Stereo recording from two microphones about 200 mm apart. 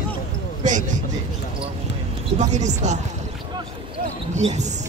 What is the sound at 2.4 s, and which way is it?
Speech, 35° right (ahead or behind).